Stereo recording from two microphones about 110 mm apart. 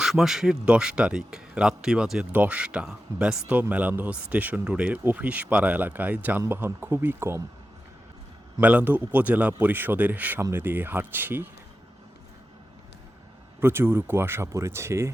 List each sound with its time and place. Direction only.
0.0 s speech: 5° right (ahead or behind); by 7.4 s 25° right (ahead or behind)
8.6 s speech: 15° right (ahead or behind)
13.6 s speech: 20° right (ahead or behind)